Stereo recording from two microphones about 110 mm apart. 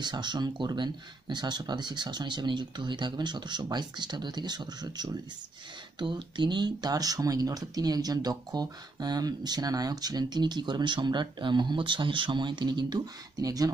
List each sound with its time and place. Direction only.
0.0 s speech: 40° right (ahead or behind)